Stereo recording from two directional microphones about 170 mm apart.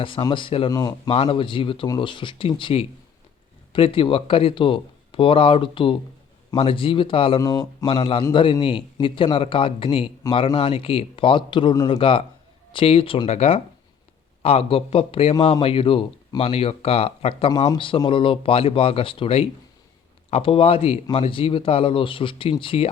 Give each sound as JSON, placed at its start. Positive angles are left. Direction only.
{"t": 0.0, "sound": "speech", "side_deg": 30}
{"t": 1.1, "sound": "speech", "side_deg": 35}